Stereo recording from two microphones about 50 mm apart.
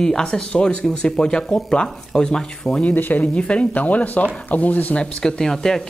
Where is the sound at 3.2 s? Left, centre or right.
Left.